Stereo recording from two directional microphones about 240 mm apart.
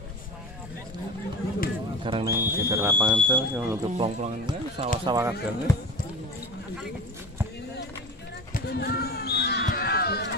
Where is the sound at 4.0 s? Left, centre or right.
Right.